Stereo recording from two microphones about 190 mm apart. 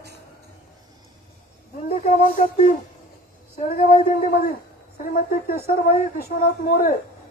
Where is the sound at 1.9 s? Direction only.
35° left (ahead or behind).